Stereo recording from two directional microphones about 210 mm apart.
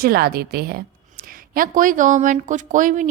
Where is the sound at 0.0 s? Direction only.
45° right (ahead or behind).